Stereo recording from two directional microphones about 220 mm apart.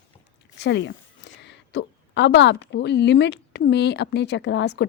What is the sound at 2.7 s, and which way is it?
Speech, 50° left (ahead or behind).